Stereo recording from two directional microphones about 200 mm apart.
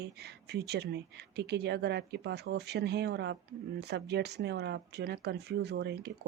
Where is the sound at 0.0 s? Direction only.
55° right (ahead or behind).